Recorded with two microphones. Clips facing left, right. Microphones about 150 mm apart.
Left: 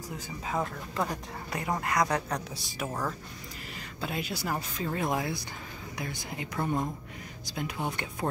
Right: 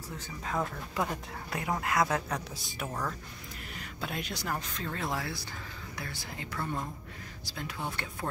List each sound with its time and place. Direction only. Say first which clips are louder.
0.9 s speech: left 1 dB; centre (ahead or behind); by 8.3 s 20° left (ahead or behind)